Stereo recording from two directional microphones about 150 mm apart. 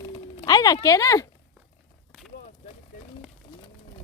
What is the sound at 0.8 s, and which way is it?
Speech, 20° left (ahead or behind).